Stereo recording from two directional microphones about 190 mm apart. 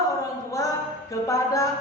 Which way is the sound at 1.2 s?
15° left (ahead or behind).